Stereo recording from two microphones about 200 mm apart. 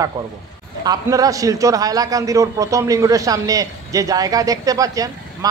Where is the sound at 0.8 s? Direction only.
15° right (ahead or behind).